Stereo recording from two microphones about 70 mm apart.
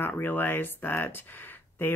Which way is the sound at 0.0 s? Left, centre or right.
Left.